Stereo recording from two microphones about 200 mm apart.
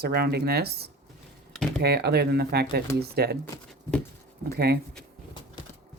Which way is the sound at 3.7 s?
5° left (ahead or behind).